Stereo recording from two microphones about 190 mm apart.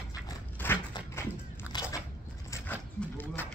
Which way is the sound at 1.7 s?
20° left (ahead or behind).